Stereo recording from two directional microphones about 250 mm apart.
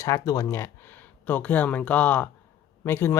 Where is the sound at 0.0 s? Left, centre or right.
Centre.